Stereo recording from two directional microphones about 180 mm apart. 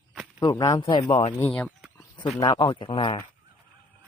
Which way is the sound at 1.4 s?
5° left (ahead or behind).